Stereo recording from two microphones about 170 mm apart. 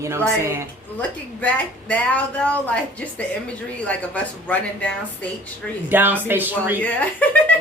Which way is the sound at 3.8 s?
10° left (ahead or behind).